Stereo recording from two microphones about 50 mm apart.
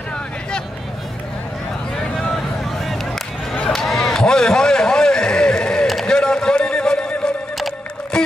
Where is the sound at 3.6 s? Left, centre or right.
Centre.